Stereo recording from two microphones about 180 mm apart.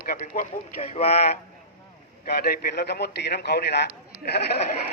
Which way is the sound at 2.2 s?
60° left (ahead or behind).